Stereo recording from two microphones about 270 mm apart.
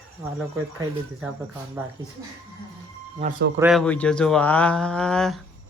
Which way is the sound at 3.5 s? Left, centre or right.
Centre.